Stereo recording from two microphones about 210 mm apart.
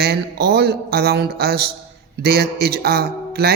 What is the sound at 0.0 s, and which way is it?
Mantra, 50° right (ahead or behind).